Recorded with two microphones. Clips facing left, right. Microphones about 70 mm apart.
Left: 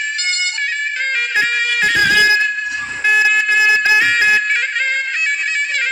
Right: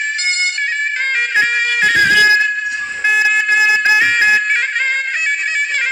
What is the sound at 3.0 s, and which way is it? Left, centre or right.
Music, centre.